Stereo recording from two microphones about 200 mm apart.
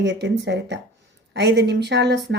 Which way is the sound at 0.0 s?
60° right (ahead or behind).